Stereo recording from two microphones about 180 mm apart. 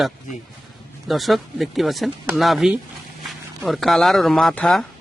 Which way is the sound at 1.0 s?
Centre (ahead or behind).